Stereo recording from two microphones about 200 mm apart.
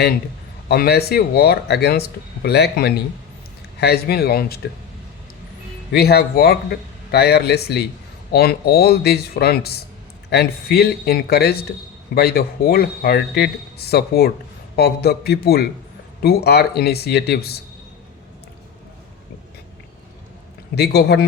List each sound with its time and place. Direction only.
0.7 s speech: 50° left (ahead or behind)
5.9 s speech: 50° left (ahead or behind)
20.7 s speech: 55° left (ahead or behind)